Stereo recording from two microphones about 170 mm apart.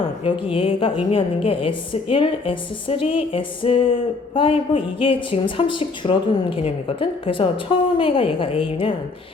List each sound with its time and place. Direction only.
0.0 s a woman's voice: 30° left (ahead or behind)